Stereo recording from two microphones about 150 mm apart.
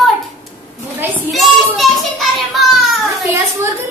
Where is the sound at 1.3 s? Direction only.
Centre (ahead or behind).